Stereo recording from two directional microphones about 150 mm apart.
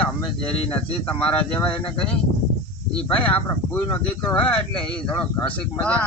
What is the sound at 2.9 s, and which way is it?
Speech, 10° left (ahead or behind).